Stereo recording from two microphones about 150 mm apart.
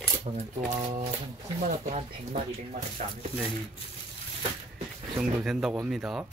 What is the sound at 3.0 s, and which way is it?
Speech, 55° right (ahead or behind).